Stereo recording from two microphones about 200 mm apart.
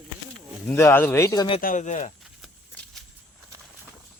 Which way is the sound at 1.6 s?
40° left (ahead or behind).